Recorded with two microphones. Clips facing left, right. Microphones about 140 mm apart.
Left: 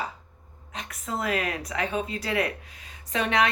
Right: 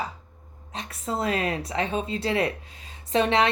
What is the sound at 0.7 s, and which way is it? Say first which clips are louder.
Speech: right 3 dB; 30° right (ahead or behind).